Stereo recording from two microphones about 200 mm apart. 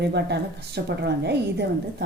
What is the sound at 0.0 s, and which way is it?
A woman's voice, 55° right (ahead or behind).